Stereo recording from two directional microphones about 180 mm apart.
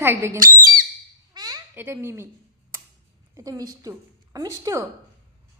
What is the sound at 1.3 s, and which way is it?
Squawk, 20° right (ahead or behind).